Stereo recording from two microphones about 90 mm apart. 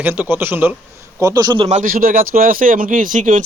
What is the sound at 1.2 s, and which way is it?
Speech, 45° right (ahead or behind).